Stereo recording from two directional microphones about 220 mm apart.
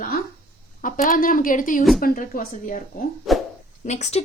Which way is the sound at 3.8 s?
30° left (ahead or behind).